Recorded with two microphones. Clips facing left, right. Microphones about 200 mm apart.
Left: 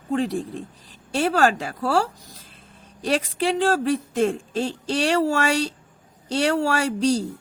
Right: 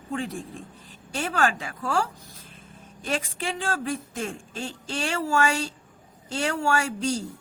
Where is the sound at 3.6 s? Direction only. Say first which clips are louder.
Left 8 dB; 40° left (ahead or behind).